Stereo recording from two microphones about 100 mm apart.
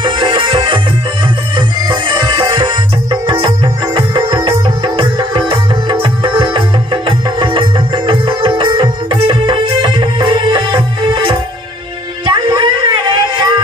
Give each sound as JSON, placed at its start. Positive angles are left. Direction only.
{"t": 0.0, "sound": "music", "side_deg": -50}
{"t": 1.9, "sound": "music", "side_deg": -50}
{"t": 12.3, "sound": "a sound", "side_deg": -50}